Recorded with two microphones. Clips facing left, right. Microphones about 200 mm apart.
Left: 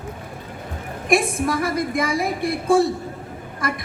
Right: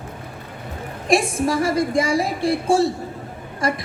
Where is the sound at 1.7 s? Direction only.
30° right (ahead or behind).